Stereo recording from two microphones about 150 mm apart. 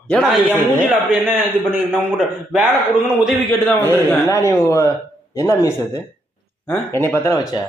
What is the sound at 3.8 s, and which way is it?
A man's voice, 15° left (ahead or behind).